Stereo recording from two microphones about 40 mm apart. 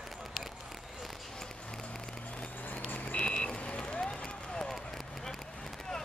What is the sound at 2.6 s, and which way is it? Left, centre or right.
Vehicle, left.